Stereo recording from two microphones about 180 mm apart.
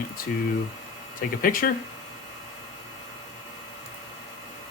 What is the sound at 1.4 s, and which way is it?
Speech, 55° left (ahead or behind).